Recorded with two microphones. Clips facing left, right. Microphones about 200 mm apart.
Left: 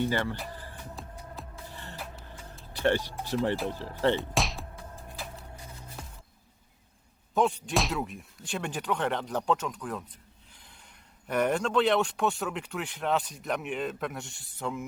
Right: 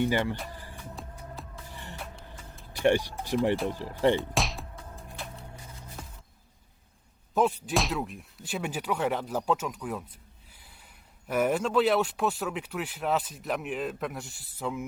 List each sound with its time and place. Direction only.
0.0 s speech: 15° right (ahead or behind)
0.5 s music: 15° right (ahead or behind)
1.0 s music: centre (ahead or behind)
1.7 s music: 15° right (ahead or behind)
2.7 s speech: 15° right (ahead or behind)
4.2 s music: centre (ahead or behind)
5.1 s a sound: centre (ahead or behind)
7.3 s speech: centre (ahead or behind)
11.3 s speech: 5° right (ahead or behind)